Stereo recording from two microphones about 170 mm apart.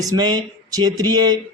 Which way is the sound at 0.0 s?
20° right (ahead or behind).